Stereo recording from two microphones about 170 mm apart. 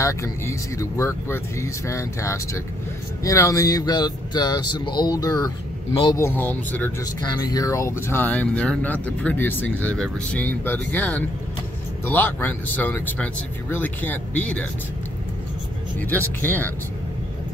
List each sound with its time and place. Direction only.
0.0 s speech: 20° left (ahead or behind)
7.2 s speech: 25° left (ahead or behind)
16.0 s speech: 10° left (ahead or behind)